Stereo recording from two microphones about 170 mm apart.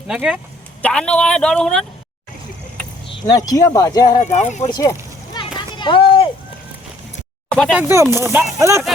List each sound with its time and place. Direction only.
0.1 s a man's voice: 5° right (ahead or behind)
0.8 s a man's voice: 5° left (ahead or behind)
3.1 s speech: 20° left (ahead or behind)
4.2 s speech: 45° left (ahead or behind)
4.6 s a sound: 20° left (ahead or behind)
7.7 s speech: 10° right (ahead or behind)